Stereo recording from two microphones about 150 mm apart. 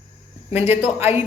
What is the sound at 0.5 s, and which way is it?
Speech, 15° right (ahead or behind).